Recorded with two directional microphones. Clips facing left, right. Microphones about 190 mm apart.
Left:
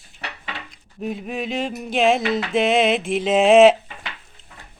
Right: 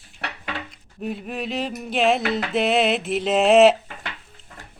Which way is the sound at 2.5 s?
Centre (ahead or behind).